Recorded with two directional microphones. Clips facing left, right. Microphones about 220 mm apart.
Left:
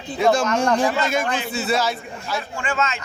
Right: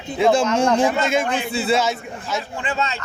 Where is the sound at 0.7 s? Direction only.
25° right (ahead or behind).